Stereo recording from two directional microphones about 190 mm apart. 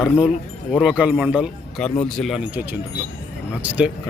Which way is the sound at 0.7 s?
5° right (ahead or behind).